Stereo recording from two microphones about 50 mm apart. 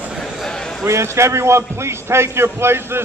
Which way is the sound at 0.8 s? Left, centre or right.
Right.